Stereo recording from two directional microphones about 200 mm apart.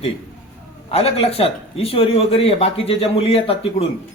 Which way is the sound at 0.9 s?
30° left (ahead or behind).